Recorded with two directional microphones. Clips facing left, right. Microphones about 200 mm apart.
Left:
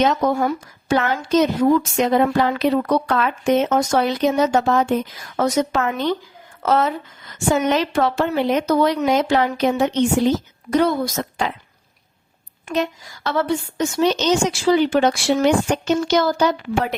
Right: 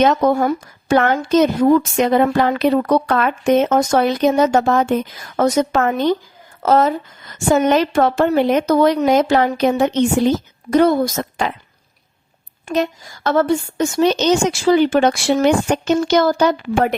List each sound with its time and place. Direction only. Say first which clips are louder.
0.0 s a woman's voice: right 4 dB; 55° right (ahead or behind)
13.2 s a woman's voice: right 5 dB; 50° right (ahead or behind)